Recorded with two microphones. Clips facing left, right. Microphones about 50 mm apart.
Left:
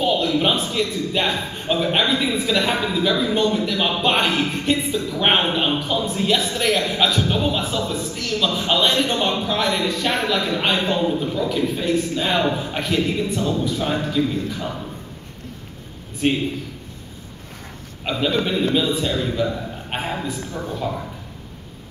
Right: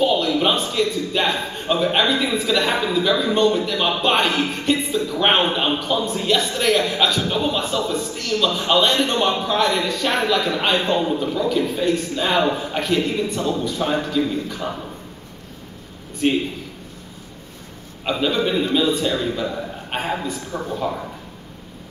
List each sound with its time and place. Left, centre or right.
0.3 s a sound: centre
0.7 s a man's voice: centre
18.0 s a man's voice: centre
20.5 s speech: right